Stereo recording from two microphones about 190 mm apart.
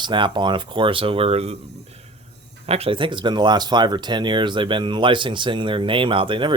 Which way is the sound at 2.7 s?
30° right (ahead or behind).